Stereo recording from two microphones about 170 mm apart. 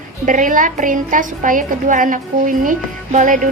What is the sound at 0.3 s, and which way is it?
A woman's voice, 50° right (ahead or behind).